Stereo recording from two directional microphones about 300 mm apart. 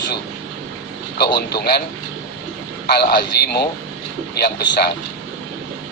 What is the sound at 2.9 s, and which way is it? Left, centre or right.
Speech, left.